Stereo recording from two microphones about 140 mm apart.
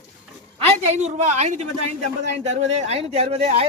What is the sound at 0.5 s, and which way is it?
Speech, 50° right (ahead or behind).